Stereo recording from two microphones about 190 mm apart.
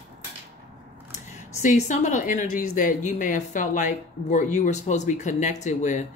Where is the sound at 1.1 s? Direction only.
40° left (ahead or behind).